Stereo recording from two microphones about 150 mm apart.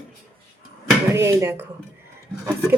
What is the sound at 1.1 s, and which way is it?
Speech, 20° right (ahead or behind).